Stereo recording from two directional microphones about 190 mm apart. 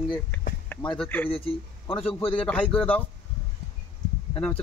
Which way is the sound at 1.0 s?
10° left (ahead or behind).